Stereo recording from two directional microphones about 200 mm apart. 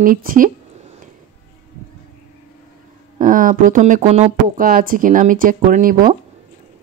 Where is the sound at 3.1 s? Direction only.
40° right (ahead or behind).